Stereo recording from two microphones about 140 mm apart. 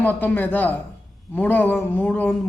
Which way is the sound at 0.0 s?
15° left (ahead or behind).